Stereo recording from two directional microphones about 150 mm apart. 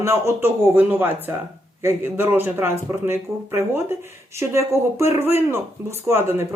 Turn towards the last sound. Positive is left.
turn(degrees=-15)  # may be behind; listen again after turning